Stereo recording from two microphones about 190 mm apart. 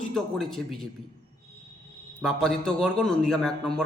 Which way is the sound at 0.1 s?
Centre (ahead or behind).